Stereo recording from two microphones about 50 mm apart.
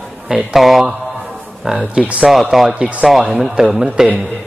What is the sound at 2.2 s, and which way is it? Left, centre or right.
A man's voice, centre.